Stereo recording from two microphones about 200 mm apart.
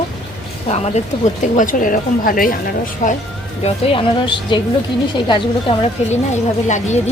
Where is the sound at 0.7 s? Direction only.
35° left (ahead or behind).